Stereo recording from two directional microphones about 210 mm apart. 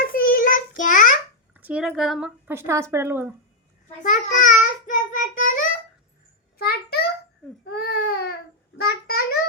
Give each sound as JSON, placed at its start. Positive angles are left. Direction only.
{"t": 0.0, "sound": "child singing", "side_deg": 45}
{"t": 0.8, "sound": "a sound", "side_deg": 40}
{"t": 1.5, "sound": "a woman's voice", "side_deg": -5}
{"t": 4.0, "sound": "child singing", "side_deg": 40}
{"t": 6.6, "sound": "a sound", "side_deg": 50}
{"t": 7.7, "sound": "baby cry", "side_deg": 50}
{"t": 8.8, "sound": "child singing", "side_deg": 50}